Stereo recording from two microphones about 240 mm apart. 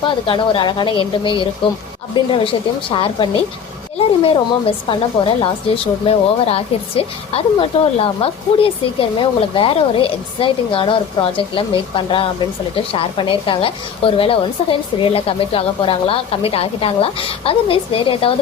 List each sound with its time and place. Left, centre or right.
0.0 s a woman's voice: left